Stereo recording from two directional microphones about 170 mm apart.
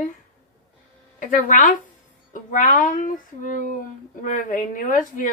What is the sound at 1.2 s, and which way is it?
Speech, 50° left (ahead or behind).